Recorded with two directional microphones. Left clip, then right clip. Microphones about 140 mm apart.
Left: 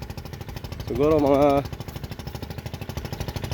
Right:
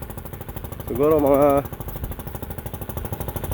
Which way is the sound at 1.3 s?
20° left (ahead or behind).